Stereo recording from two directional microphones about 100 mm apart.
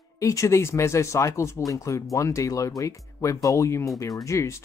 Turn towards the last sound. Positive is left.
turn(degrees=30)  # may be behind; listen again after turning